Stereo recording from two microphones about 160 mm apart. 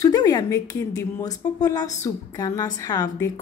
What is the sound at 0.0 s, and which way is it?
A woman's voice, 25° left (ahead or behind).